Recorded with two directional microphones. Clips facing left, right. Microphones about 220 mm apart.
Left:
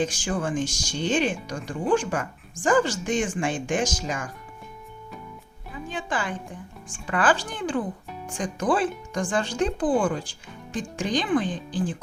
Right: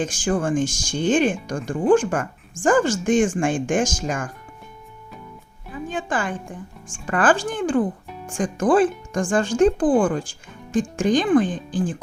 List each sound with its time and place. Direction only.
0.0 s speech: 50° right (ahead or behind)
5.9 s a woman's voice: 50° right (ahead or behind)